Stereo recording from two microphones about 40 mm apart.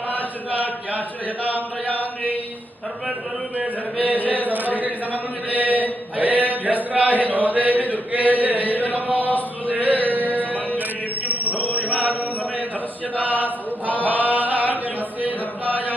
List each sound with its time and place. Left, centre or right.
0.2 s chant: right
1.8 s chant: left
4.4 s a sound: right
5.1 s mantra: right
6.9 s chant: right
9.6 s male singing: right
11.4 s chant: left
13.3 s chant: left
14.0 s chant: right